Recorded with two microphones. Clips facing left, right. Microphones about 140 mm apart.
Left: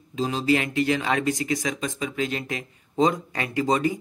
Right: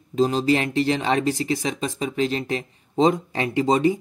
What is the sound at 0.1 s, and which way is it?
Speech, 40° right (ahead or behind).